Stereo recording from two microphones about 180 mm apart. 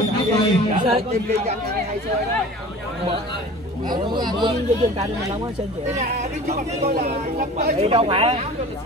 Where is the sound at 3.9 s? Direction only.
25° right (ahead or behind).